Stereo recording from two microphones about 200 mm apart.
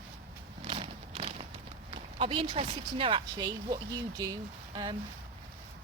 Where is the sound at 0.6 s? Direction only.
30° right (ahead or behind).